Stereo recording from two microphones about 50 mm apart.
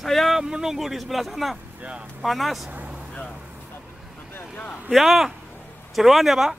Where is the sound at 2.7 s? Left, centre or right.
Right.